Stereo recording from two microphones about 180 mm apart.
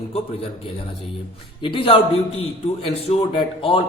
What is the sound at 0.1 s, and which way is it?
Speech, 35° left (ahead or behind).